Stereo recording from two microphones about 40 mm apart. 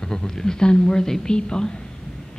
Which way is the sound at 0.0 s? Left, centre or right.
Centre.